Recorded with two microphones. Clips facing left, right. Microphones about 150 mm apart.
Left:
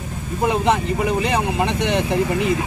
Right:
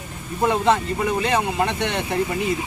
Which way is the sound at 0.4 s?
15° left (ahead or behind).